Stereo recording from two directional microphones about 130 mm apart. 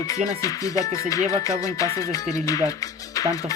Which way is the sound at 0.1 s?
25° left (ahead or behind).